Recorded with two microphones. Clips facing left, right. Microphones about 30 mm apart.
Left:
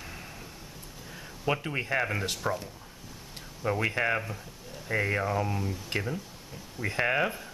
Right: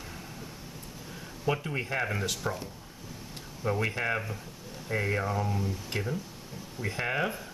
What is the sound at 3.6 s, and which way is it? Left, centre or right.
Speech, centre.